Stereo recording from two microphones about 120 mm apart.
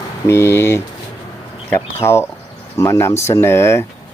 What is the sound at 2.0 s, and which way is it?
Speech, 20° left (ahead or behind).